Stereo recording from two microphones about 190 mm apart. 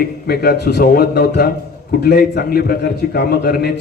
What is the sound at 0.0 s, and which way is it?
A man's voice, 55° left (ahead or behind).